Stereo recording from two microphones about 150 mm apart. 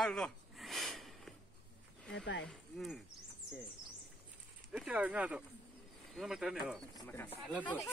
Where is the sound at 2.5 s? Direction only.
Centre (ahead or behind).